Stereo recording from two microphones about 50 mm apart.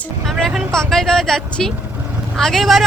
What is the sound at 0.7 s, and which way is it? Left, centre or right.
Speech, centre.